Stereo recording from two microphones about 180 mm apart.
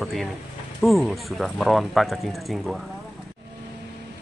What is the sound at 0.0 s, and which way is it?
Speech, centre (ahead or behind).